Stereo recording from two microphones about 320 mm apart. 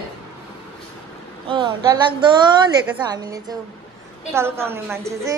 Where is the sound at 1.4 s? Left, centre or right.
Centre.